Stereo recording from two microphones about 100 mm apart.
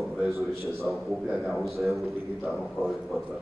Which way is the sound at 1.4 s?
Centre (ahead or behind).